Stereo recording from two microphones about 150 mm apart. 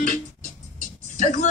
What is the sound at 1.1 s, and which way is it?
Speech, 60° left (ahead or behind).